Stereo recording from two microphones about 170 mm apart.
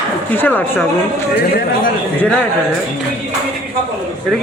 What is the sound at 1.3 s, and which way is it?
Speech, 70° left (ahead or behind).